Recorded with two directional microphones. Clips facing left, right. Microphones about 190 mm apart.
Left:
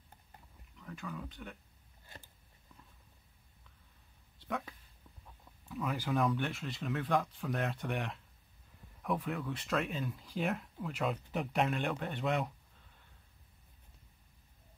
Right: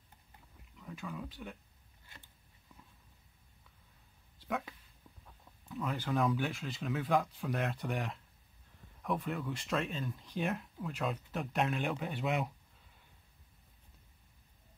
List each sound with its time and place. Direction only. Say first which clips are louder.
0.7 s speech: right 1 dB; 5° right (ahead or behind)
4.5 s speech: right 1 dB; centre (ahead or behind)